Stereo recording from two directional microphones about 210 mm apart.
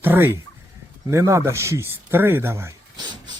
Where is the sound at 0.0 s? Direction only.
10° right (ahead or behind).